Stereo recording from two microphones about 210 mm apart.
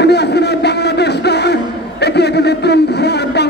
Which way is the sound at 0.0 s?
55° left (ahead or behind).